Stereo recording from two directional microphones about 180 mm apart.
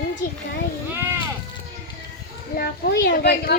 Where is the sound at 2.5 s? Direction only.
65° left (ahead or behind).